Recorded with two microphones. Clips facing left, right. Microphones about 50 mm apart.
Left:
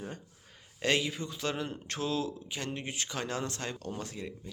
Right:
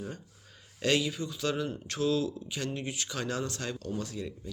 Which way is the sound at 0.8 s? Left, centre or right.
Left.